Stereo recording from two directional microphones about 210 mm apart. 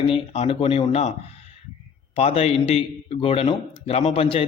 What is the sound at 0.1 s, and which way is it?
A man's voice, 25° left (ahead or behind).